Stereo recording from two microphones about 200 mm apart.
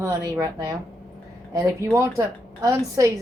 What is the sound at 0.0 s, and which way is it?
A woman's voice, 15° right (ahead or behind).